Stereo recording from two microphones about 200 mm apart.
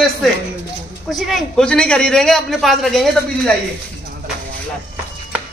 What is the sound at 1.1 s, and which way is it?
A man's voice, centre (ahead or behind).